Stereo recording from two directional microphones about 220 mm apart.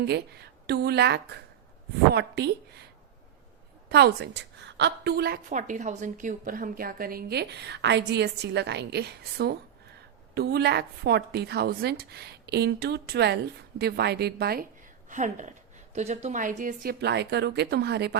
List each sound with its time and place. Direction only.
0.0 s a woman's voice: 50° right (ahead or behind)
3.8 s a woman's voice: 50° right (ahead or behind)
5.5 s a woman's voice: 35° right (ahead or behind)